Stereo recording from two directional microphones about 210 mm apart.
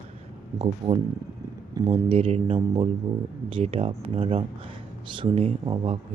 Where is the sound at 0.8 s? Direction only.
25° right (ahead or behind).